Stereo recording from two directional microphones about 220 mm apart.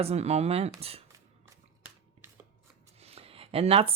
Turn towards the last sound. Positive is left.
turn(degrees=-25)  # may be behind; listen again after turning